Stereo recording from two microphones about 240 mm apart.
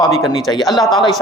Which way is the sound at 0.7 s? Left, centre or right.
Centre.